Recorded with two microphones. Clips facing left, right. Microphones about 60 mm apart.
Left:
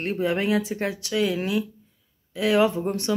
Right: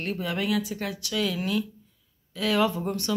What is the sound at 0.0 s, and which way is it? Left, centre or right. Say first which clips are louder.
Speech: left 5 dB; left.